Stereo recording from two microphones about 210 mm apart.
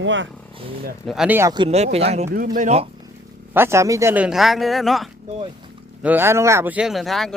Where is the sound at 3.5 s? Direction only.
10° right (ahead or behind).